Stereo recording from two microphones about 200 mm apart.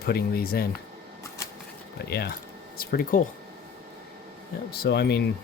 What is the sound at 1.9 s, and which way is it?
Speech, 55° left (ahead or behind).